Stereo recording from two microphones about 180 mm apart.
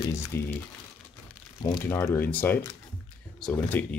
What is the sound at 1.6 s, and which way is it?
Speech, 15° left (ahead or behind).